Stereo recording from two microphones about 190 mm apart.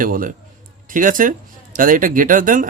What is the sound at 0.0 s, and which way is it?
Speech, 45° right (ahead or behind).